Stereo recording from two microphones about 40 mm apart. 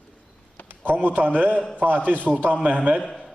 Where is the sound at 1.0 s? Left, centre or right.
Right.